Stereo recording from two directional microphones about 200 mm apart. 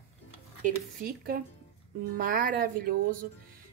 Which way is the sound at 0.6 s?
45° right (ahead or behind).